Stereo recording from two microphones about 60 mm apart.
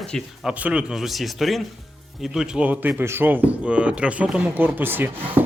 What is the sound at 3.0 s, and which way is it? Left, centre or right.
Speech, right.